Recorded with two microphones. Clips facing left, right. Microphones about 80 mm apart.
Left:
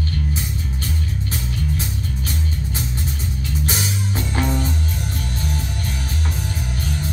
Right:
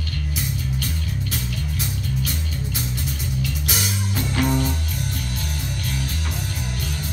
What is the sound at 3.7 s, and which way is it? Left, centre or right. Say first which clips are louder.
Music: left 2 dB; left.